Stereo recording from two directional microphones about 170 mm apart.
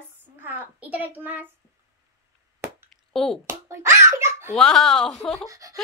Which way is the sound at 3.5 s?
15° right (ahead or behind).